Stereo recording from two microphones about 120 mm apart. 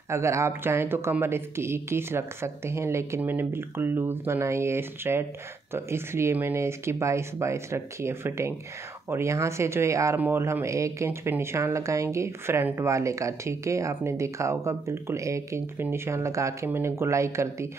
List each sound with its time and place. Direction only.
0.1 s speech: 25° right (ahead or behind)